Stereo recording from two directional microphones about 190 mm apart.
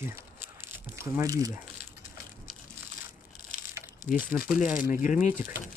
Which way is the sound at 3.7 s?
10° right (ahead or behind).